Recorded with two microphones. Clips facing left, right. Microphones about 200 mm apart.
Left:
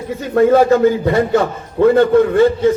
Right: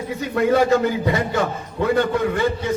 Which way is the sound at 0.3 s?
50° left (ahead or behind).